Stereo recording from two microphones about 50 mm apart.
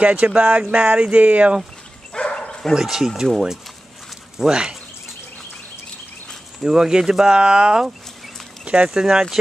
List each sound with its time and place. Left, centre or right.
0.0 s speech: right
2.1 s bow-wow: left
2.7 s speech: centre
4.4 s speech: centre
6.6 s speech: centre